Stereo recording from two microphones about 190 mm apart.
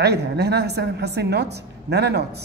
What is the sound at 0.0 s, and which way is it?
A woman's voice, 60° right (ahead or behind).